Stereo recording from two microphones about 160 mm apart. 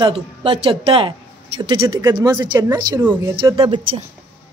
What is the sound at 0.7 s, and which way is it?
Speech, 35° right (ahead or behind).